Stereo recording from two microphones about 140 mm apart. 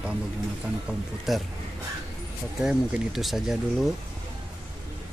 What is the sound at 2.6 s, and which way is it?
Speech, 5° right (ahead or behind).